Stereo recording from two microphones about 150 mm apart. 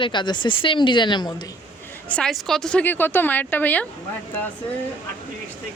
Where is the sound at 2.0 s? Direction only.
5° left (ahead or behind).